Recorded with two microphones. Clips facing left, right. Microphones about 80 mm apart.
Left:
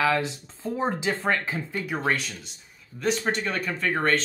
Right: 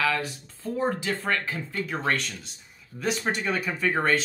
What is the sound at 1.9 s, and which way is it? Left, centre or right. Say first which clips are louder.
Speech: left 1 dB; centre.